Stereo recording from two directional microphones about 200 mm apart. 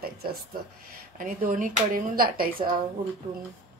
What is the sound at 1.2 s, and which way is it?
Speech, 40° right (ahead or behind).